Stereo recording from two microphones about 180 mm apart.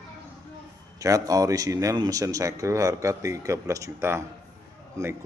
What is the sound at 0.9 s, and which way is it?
A man's voice, 20° right (ahead or behind).